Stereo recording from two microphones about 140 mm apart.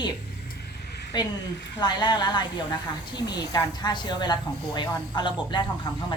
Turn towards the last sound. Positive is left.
turn(degrees=35)  # may be behind; listen again after turning